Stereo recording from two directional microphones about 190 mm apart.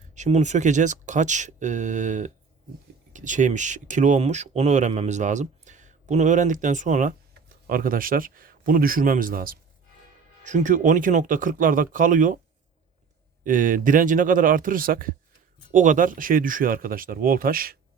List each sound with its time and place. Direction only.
0.1 s speech: 35° right (ahead or behind)
13.4 s speech: 45° right (ahead or behind)